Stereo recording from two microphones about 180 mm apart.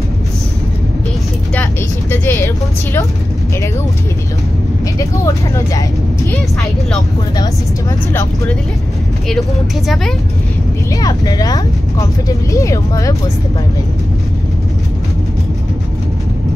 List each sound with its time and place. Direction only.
1.5 s speech: 10° left (ahead or behind)
4.9 s speech: 20° left (ahead or behind)
8.1 s speech: 10° left (ahead or behind)
9.3 s speech: centre (ahead or behind)
11.0 s speech: 20° left (ahead or behind)